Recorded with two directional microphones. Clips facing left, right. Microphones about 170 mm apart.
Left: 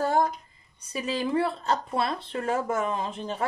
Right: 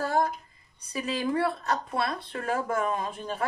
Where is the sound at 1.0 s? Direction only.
25° left (ahead or behind).